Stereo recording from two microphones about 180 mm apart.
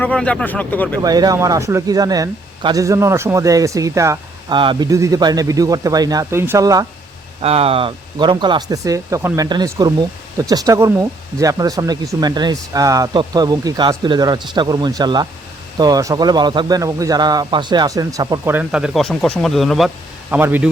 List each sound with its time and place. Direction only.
0.0 s speech: 5° left (ahead or behind)
1.0 s speech: 20° right (ahead or behind)
7.4 s speech: 35° right (ahead or behind)
18.5 s speech: 5° right (ahead or behind)